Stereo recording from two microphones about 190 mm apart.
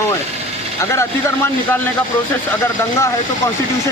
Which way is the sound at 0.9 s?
15° left (ahead or behind).